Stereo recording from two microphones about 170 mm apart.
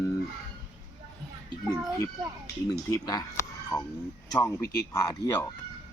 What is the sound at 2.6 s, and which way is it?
Speech, 25° left (ahead or behind).